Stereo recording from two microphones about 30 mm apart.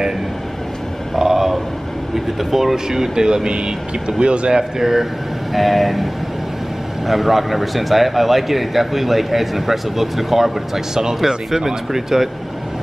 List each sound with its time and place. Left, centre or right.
1.1 s vehicle: centre
2.1 s speech: centre
2.7 s speech: centre; by 4.6 s right
4.6 s speech: centre
5.5 s a man's voice: centre
7.1 s a man's voice: centre